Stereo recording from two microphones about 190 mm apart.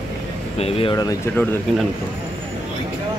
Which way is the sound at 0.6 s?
30° left (ahead or behind).